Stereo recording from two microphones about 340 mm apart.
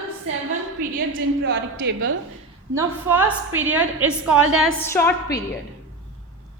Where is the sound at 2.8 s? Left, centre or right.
Centre.